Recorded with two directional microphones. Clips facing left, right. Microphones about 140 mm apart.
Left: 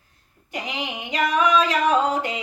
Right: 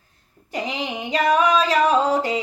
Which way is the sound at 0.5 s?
35° right (ahead or behind).